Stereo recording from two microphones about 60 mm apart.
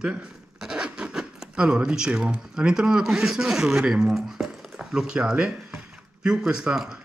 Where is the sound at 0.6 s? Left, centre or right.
Centre.